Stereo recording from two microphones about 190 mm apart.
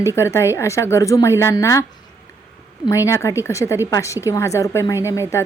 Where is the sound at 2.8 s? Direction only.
15° left (ahead or behind).